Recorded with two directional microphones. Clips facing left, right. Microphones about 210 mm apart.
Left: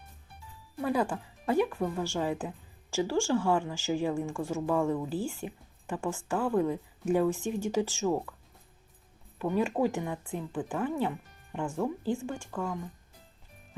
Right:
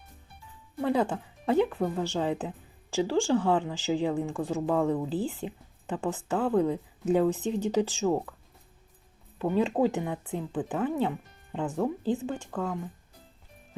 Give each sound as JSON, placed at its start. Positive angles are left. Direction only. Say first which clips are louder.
{"t": 0.8, "sound": "speech", "louder": "right 3 dB", "side_deg": -25}
{"t": 9.4, "sound": "speech", "louder": "right 3 dB", "side_deg": -20}